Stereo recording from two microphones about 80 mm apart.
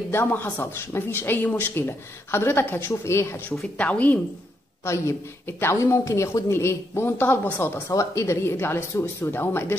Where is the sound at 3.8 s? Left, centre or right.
Centre.